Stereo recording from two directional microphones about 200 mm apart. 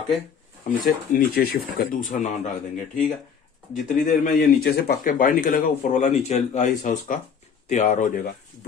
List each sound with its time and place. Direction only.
0.7 s a man's voice: 45° left (ahead or behind)